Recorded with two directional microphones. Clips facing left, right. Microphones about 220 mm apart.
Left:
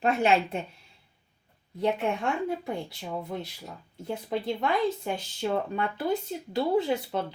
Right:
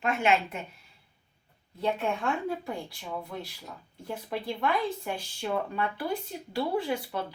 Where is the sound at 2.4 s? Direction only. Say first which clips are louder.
Left 2 dB; 20° left (ahead or behind).